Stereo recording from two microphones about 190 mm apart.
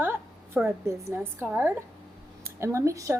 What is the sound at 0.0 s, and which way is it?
A woman's voice, 10° right (ahead or behind).